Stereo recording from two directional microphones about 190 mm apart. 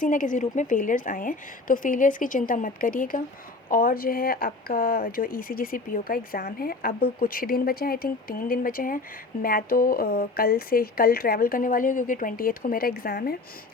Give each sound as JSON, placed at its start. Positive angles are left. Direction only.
{"t": 0.0, "sound": "speech", "side_deg": 45}